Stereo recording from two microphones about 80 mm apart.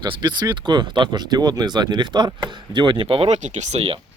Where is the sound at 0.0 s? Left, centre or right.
Right.